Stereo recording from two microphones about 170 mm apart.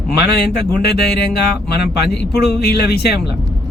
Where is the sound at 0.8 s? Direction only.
75° left (ahead or behind).